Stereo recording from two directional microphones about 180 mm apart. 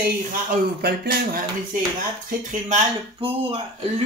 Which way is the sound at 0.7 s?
55° right (ahead or behind).